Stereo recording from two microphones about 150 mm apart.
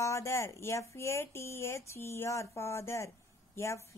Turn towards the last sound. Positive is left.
turn(degrees=20)  # may be behind; listen again after turning